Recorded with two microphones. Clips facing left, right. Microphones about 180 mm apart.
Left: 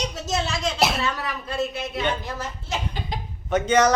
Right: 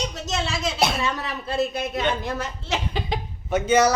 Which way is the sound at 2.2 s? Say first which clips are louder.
Right 3 dB; 75° right (ahead or behind).